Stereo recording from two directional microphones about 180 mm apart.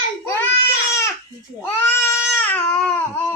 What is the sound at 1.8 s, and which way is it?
Baby cry, 15° left (ahead or behind).